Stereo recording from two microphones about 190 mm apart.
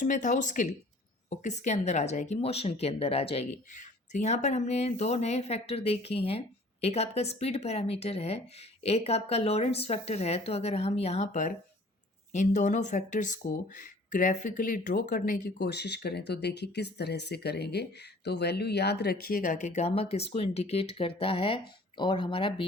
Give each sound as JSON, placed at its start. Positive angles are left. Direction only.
{"t": 0.0, "sound": "speech", "side_deg": 40}